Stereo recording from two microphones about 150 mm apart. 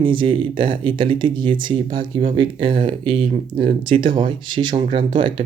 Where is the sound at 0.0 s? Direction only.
35° right (ahead or behind).